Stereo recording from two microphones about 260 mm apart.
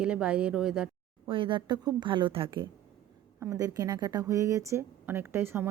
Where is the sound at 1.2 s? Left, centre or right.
Centre.